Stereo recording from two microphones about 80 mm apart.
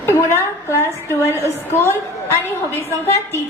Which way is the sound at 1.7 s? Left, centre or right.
Left.